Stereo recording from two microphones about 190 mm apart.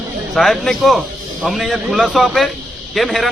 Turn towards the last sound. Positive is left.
turn(degrees=0)  # may be behind; listen again after turning